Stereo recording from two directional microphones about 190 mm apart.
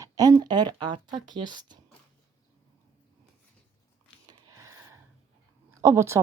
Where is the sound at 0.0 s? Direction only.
20° right (ahead or behind).